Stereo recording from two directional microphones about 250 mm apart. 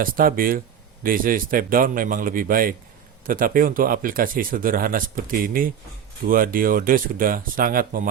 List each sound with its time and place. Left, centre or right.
0.0 s speech: right